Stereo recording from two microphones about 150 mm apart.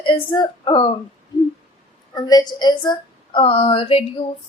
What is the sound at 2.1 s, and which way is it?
A woman's voice, 25° left (ahead or behind).